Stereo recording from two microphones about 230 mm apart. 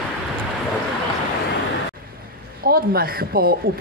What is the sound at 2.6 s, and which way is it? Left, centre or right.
Speech, right.